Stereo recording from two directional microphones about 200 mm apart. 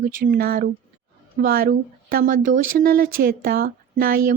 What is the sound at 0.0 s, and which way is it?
A woman's voice, 40° right (ahead or behind).